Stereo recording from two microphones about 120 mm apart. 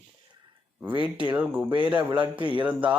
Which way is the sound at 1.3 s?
10° right (ahead or behind).